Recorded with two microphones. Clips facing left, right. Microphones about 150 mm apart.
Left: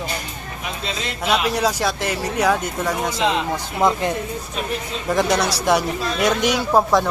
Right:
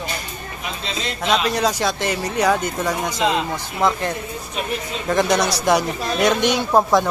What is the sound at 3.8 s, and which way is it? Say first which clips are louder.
Speech: left 1 dB; 15° left (ahead or behind).